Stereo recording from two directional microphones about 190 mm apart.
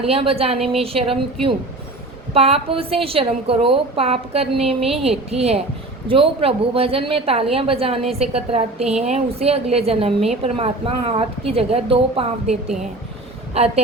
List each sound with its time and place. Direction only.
0.0 s a woman's voice: 30° right (ahead or behind)
13.5 s a woman's voice: 35° right (ahead or behind)